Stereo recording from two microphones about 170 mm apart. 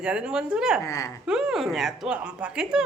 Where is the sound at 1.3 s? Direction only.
5° right (ahead or behind).